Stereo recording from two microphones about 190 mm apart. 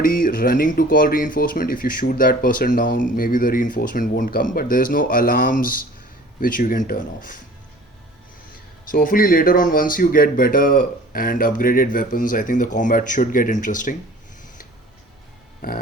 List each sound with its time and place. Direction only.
0.0 s speech: 50° left (ahead or behind)
8.9 s speech: 50° left (ahead or behind)